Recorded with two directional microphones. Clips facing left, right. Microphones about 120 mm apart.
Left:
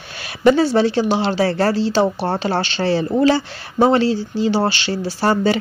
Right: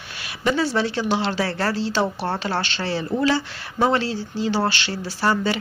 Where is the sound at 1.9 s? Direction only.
25° left (ahead or behind).